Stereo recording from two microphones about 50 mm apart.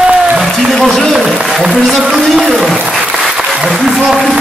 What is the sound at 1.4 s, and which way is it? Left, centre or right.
Speech, centre.